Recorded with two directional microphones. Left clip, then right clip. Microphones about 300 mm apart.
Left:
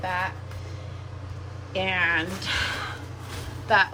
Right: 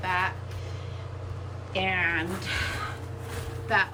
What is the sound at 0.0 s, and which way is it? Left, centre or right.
Vehicle, centre.